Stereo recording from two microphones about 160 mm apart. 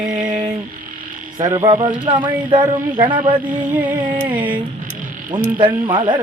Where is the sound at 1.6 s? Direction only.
30° right (ahead or behind).